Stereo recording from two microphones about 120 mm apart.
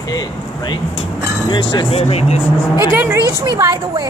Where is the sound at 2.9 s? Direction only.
15° right (ahead or behind).